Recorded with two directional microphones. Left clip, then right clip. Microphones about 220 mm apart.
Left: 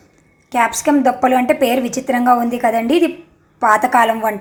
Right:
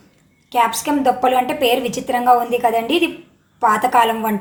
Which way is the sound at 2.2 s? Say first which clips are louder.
Right 1 dB; 15° left (ahead or behind).